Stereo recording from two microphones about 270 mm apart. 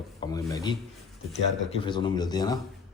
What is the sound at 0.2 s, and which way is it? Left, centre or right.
Speech, centre.